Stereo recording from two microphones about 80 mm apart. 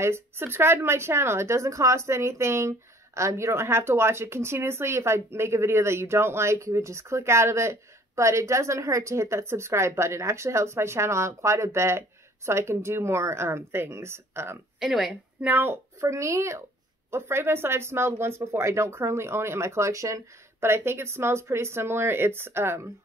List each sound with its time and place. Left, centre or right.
0.0 s speech: right
14.8 s a woman's voice: centre
15.4 s speech: right
16.1 s speech: right